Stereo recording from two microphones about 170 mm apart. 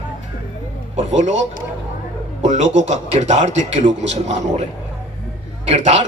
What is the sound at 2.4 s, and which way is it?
A man's voice, 45° right (ahead or behind).